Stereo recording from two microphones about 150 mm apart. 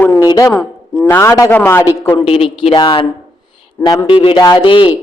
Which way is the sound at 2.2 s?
40° left (ahead or behind).